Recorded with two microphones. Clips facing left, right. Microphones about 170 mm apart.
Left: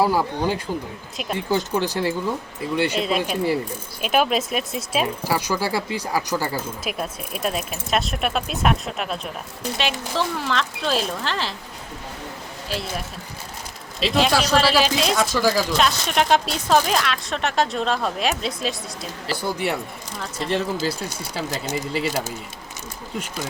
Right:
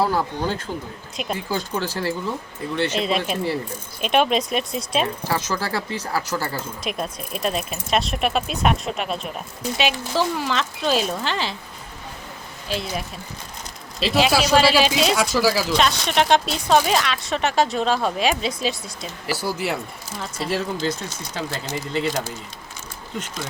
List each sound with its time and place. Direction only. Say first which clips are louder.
0.0 s speech: left 2 dB; 10° left (ahead or behind)
1.5 s speech: left 7 dB; 20° left (ahead or behind); by 11.5 s centre (ahead or behind)
14.0 s speech: right 1 dB; centre (ahead or behind)